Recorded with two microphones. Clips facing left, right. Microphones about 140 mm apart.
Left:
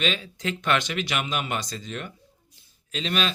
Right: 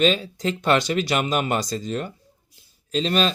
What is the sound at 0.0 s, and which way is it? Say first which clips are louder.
Speech: right 8 dB; 40° right (ahead or behind).